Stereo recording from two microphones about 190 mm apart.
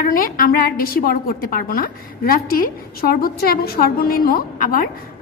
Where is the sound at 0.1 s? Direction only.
50° left (ahead or behind).